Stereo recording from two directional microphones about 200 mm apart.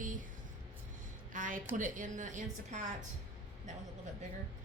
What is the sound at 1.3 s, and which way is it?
A woman's voice, 40° right (ahead or behind).